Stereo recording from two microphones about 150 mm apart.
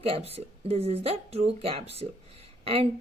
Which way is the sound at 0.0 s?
40° right (ahead or behind).